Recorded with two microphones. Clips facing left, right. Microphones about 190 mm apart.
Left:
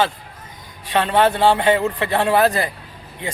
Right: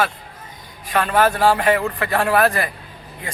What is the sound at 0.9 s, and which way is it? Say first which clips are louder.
A man's voice: left 1 dB; 25° left (ahead or behind).